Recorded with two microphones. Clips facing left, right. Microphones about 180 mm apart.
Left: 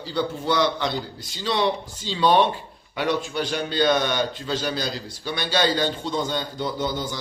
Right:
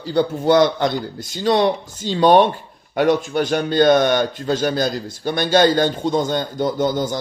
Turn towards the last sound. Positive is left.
turn(degrees=-45)  # may be behind; listen again after turning